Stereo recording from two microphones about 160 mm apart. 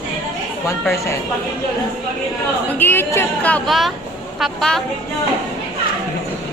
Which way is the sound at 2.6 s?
10° left (ahead or behind).